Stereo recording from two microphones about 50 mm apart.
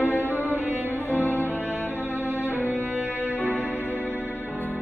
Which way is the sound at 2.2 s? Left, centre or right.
Right.